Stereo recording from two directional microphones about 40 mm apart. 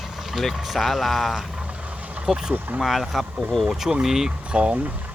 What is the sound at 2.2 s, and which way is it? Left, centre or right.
Speech, centre.